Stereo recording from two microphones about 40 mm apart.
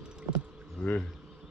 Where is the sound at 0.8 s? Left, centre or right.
Centre.